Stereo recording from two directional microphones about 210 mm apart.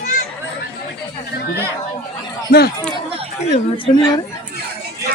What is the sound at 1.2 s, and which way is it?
Chatter, 50° left (ahead or behind).